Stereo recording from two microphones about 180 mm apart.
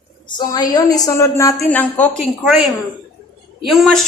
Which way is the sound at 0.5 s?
20° left (ahead or behind).